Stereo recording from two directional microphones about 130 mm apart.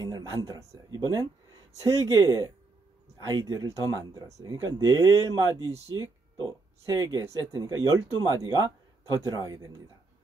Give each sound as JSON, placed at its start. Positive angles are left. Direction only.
{"t": 0.0, "sound": "speech", "side_deg": -30}